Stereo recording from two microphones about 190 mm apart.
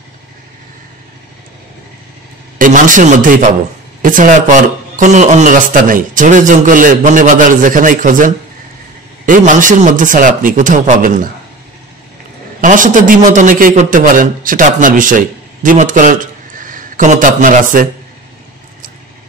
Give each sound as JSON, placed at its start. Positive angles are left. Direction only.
{"t": 2.6, "sound": "a man's voice", "side_deg": -45}
{"t": 12.5, "sound": "a man's voice", "side_deg": -45}